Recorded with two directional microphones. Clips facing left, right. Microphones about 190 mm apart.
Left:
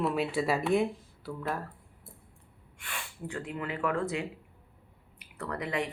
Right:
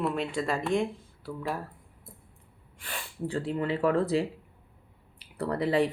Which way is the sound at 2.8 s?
35° right (ahead or behind).